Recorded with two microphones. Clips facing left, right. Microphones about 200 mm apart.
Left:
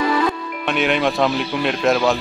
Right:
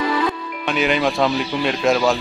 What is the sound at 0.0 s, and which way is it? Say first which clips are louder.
Music: left 2 dB; 50° left (ahead or behind).